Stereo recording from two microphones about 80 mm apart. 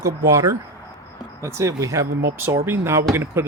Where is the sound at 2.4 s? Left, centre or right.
Right.